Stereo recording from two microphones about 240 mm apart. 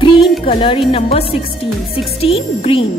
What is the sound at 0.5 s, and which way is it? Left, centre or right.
A woman's voice, left.